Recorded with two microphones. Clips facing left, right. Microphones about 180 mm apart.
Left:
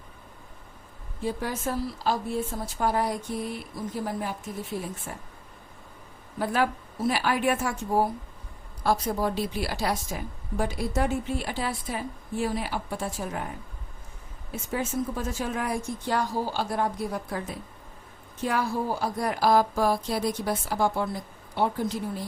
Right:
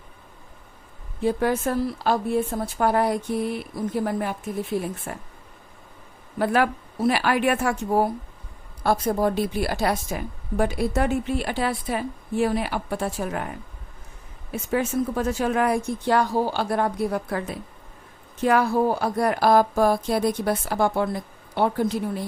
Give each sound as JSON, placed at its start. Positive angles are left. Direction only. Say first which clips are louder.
{"t": 1.2, "sound": "a woman's voice", "louder": "right 8 dB", "side_deg": -60}
{"t": 6.4, "sound": "a woman's voice", "louder": "right 4 dB", "side_deg": -65}
{"t": 8.8, "sound": "a woman's voice", "louder": "right 4 dB", "side_deg": -55}
{"t": 14.5, "sound": "speech", "louder": "right 6 dB", "side_deg": -65}